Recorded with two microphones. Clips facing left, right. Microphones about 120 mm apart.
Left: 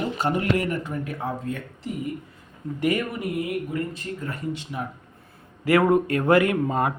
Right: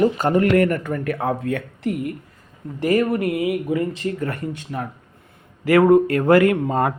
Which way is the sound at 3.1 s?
75° right (ahead or behind).